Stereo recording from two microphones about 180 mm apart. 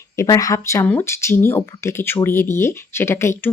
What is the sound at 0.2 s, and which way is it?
Speech, 20° left (ahead or behind).